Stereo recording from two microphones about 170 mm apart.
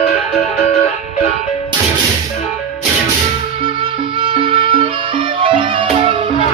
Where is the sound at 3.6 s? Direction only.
30° right (ahead or behind).